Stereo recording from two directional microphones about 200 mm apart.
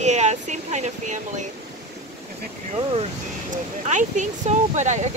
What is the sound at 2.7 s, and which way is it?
Speech, 30° right (ahead or behind).